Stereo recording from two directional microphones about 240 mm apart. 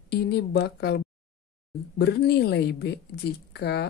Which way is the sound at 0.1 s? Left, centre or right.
Left.